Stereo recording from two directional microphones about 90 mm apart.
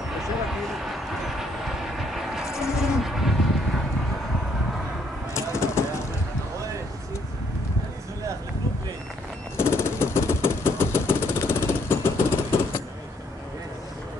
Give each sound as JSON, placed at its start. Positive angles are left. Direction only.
{"t": 0.5, "sound": "vehicle", "side_deg": -5}
{"t": 5.3, "sound": "a sound", "side_deg": 30}
{"t": 9.6, "sound": "vehicle", "side_deg": 30}